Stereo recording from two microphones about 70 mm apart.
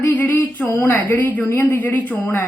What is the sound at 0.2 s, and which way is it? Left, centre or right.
A woman's voice, left.